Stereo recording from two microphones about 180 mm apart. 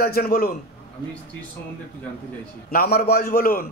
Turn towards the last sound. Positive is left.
turn(degrees=55)  # may be behind; listen again after turning